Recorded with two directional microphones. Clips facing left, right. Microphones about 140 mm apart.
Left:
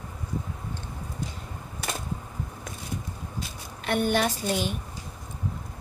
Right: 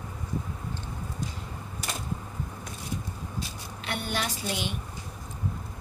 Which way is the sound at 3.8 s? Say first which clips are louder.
Left 8 dB; 50° left (ahead or behind).